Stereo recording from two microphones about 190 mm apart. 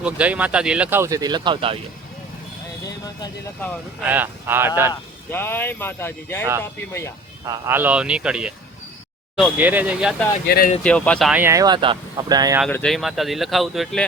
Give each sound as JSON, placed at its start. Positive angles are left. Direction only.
{"t": 0.0, "sound": "speech", "side_deg": -5}
{"t": 4.0, "sound": "speech", "side_deg": -10}
{"t": 4.9, "sound": "speech", "side_deg": 10}
{"t": 7.4, "sound": "speech", "side_deg": -15}
{"t": 10.4, "sound": "speech", "side_deg": 55}
{"t": 10.8, "sound": "speech", "side_deg": 5}
{"t": 11.3, "sound": "speech", "side_deg": -10}
{"t": 12.6, "sound": "speech", "side_deg": 5}